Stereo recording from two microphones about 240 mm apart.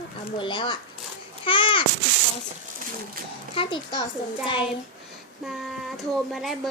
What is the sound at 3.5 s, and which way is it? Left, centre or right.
Speech, left.